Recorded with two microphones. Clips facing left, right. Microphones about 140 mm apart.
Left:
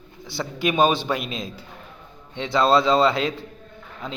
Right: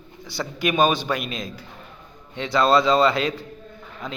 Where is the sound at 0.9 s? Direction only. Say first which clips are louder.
Even; 25° left (ahead or behind).